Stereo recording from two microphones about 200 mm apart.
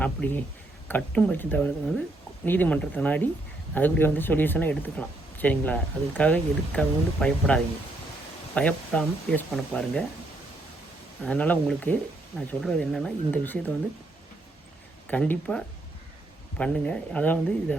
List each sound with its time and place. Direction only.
0.0 s speech: 5° left (ahead or behind)
11.2 s speech: 5° left (ahead or behind)
15.0 s speech: 5° left (ahead or behind)